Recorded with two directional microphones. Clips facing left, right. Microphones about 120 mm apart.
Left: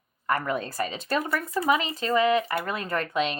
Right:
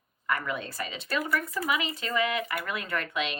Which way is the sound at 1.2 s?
30° left (ahead or behind).